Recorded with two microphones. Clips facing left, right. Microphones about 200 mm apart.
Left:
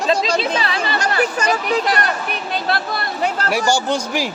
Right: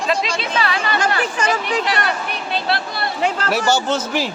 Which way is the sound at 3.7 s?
10° left (ahead or behind).